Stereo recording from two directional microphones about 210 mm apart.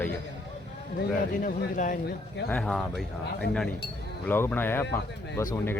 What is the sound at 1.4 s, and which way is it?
Speech, 40° left (ahead or behind).